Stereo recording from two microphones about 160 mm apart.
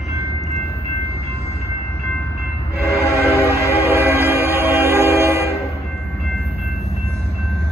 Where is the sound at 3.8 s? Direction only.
15° right (ahead or behind).